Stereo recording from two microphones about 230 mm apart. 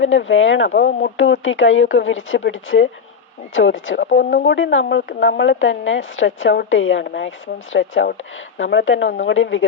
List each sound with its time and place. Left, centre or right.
0.0 s a woman's voice: left